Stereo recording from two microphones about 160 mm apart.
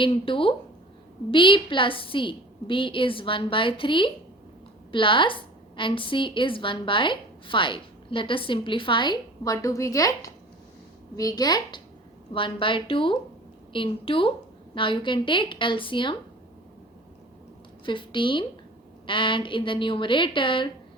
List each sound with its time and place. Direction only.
0.0 s a woman's voice: 30° left (ahead or behind)
17.8 s a woman's voice: 30° left (ahead or behind)